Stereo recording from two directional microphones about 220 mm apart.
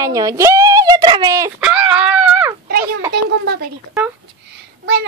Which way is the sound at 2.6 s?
45° right (ahead or behind).